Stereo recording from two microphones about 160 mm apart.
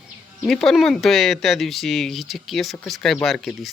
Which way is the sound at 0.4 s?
Centre (ahead or behind).